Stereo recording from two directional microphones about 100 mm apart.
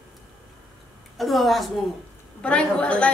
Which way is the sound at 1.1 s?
Centre (ahead or behind).